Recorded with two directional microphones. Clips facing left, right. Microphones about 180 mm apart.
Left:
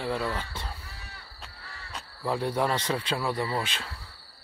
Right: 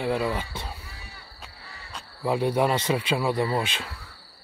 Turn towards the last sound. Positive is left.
turn(degrees=-20)  # may be behind; listen again after turning